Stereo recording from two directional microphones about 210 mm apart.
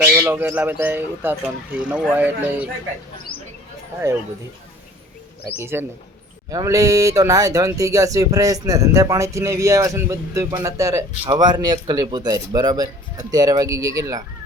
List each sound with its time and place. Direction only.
0.0 s speech: 10° right (ahead or behind)
5.5 s speech: 10° right (ahead or behind)